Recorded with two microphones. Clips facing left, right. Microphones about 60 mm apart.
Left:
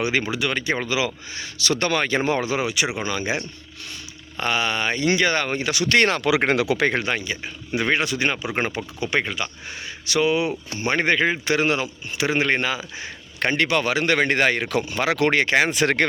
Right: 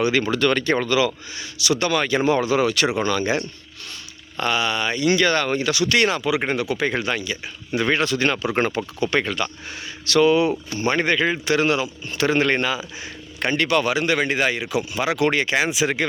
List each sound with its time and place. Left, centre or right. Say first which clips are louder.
0.0 s speech: right 4 dB; left
1.4 s a man's voice: right 1 dB; left
2.6 s a man's voice: right 4 dB; centre; by 6.2 s left
6.2 s speech: left 2 dB; left
6.9 s a man's voice: even; left
7.7 s a man's voice: right 1 dB; centre; by 15.7 s left
15.7 s speech: left 2 dB; left